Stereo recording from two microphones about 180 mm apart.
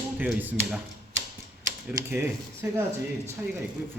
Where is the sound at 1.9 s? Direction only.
15° right (ahead or behind).